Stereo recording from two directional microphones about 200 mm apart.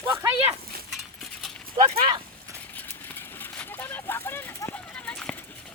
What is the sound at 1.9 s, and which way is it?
Speech, 25° right (ahead or behind).